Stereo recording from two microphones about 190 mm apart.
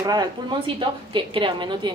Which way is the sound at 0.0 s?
20° right (ahead or behind).